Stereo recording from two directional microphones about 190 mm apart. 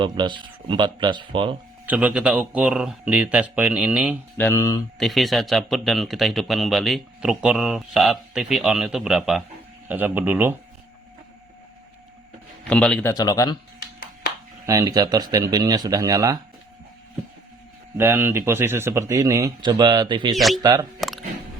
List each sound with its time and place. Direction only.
0.0 s speech: 25° right (ahead or behind)
1.9 s speech: 5° right (ahead or behind)
4.4 s a man's voice: 15° left (ahead or behind)
4.9 s speech: centre (ahead or behind)
12.6 s a man's voice: 5° left (ahead or behind)
13.1 s speech: 20° left (ahead or behind)
14.7 s speech: 20° right (ahead or behind)
17.9 s speech: 10° right (ahead or behind)
20.3 s speech: centre (ahead or behind)
20.6 s speech: 20° right (ahead or behind)